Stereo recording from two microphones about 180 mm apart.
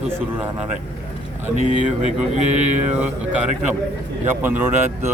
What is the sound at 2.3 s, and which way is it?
Speech, 40° right (ahead or behind).